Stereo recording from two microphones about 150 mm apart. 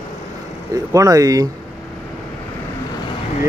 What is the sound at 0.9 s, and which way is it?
Speech, 20° right (ahead or behind).